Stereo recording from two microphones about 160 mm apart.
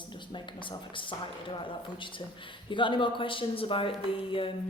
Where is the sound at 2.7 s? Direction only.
30° left (ahead or behind).